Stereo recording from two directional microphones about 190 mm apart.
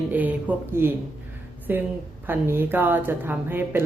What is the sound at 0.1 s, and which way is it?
A woman's voice, 10° right (ahead or behind).